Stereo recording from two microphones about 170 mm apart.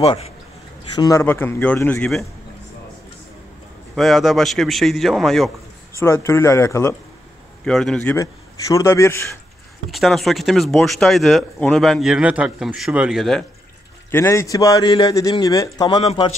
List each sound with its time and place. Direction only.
0.0 s a man's voice: 35° left (ahead or behind)
0.9 s a man's voice: 20° left (ahead or behind); by 2.2 s 5° left (ahead or behind)
3.9 s speech: centre (ahead or behind)
5.9 s a man's voice: 15° left (ahead or behind)
7.6 s speech: 5° left (ahead or behind)
8.0 s a man's voice: 15° left (ahead or behind)
9.8 s speech: centre (ahead or behind)
14.1 s a man's voice: 15° left (ahead or behind)